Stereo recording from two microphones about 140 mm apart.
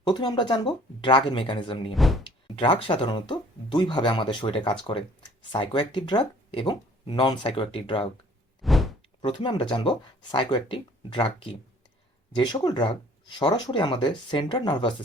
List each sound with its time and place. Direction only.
0.0 s speech: 30° left (ahead or behind)
2.0 s speech: centre (ahead or behind)
2.2 s speech: 35° left (ahead or behind)
8.6 s a sound: centre (ahead or behind)
9.2 s speech: 35° left (ahead or behind)